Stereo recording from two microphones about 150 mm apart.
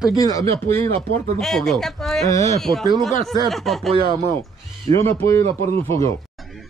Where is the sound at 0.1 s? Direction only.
25° left (ahead or behind).